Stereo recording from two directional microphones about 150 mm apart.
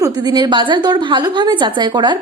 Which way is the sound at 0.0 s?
30° right (ahead or behind).